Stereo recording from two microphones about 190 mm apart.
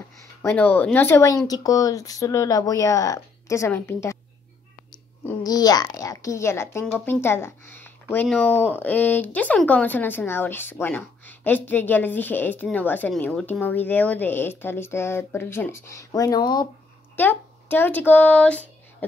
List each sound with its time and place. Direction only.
0.2 s speech: 15° left (ahead or behind)
5.2 s speech: 15° left (ahead or behind)
17.1 s speech: 10° left (ahead or behind)